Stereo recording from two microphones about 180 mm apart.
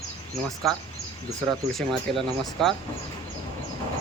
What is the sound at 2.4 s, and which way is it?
Speech, centre (ahead or behind).